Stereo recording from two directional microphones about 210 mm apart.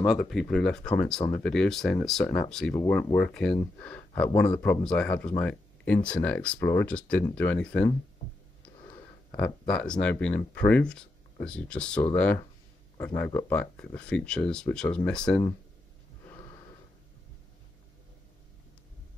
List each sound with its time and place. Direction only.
0.0 s speech: centre (ahead or behind)
8.6 s a sound: 20° left (ahead or behind)
9.4 s speech: 5° left (ahead or behind)